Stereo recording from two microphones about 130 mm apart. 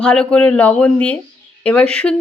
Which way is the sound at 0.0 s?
5° left (ahead or behind).